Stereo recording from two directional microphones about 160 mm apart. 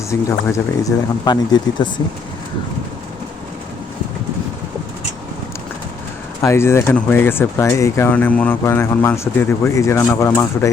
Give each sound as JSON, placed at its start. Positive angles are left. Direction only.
{"t": 0.1, "sound": "speech", "side_deg": 20}
{"t": 6.4, "sound": "speech", "side_deg": 15}